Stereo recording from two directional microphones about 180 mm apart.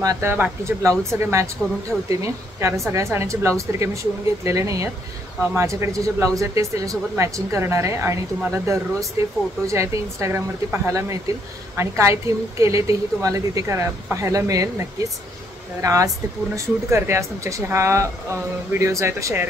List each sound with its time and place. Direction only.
0.0 s speech: 15° right (ahead or behind)